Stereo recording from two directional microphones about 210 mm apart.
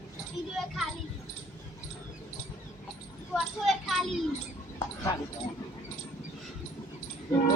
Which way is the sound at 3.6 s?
Centre (ahead or behind).